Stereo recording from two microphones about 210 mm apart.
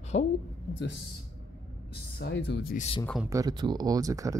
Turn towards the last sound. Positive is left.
turn(degrees=-15)  # may be behind; listen again after turning